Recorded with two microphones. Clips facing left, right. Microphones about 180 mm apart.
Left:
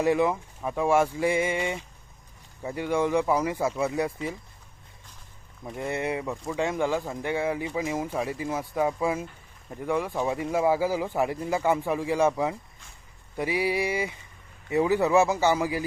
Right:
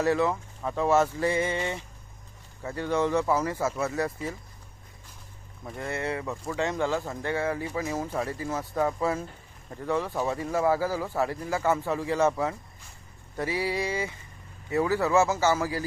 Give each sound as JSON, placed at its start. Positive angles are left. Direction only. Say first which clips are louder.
{"t": 0.0, "sound": "speech", "louder": "left 2 dB", "side_deg": 15}
{"t": 5.7, "sound": "speech", "louder": "left 2 dB", "side_deg": 15}